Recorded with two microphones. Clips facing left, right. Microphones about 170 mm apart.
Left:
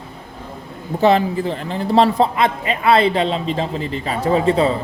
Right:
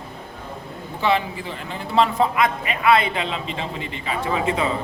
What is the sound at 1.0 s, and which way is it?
A man's voice, 40° left (ahead or behind).